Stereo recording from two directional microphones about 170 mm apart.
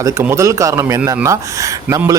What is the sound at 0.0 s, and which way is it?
A man's voice, 15° right (ahead or behind).